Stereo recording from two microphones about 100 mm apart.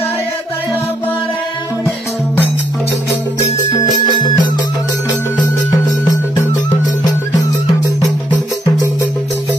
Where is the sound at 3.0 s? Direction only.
35° left (ahead or behind).